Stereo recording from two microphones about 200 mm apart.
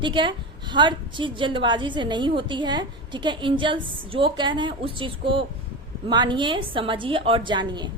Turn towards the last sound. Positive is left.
turn(degrees=-20)  # may be behind; listen again after turning